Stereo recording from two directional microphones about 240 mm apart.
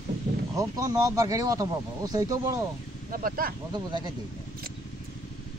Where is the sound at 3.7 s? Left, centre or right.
Centre.